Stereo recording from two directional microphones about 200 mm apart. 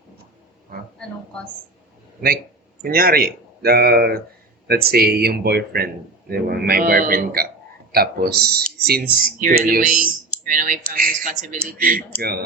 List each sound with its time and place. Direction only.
2.8 s speech: 50° right (ahead or behind)